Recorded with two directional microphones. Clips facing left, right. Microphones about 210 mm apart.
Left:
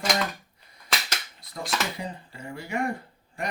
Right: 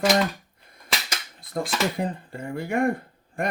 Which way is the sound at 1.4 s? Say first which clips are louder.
Right 12 dB; 50° right (ahead or behind).